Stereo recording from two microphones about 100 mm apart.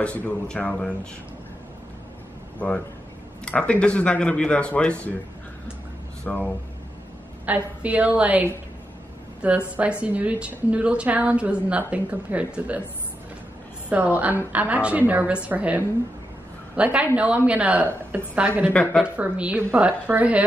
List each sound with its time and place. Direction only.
0.0 s speech: 15° left (ahead or behind)
3.4 s speech: 15° left (ahead or behind)
6.3 s speech: 5° left (ahead or behind)
7.4 s a woman's voice: 15° right (ahead or behind)
10.0 s a woman's voice: 15° right (ahead or behind)
13.8 s a woman's voice: 15° right (ahead or behind)
18.7 s speech: 10° left (ahead or behind)
19.0 s a woman's voice: 15° right (ahead or behind)